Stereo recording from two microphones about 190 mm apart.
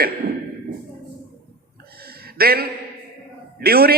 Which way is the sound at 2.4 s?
55° right (ahead or behind).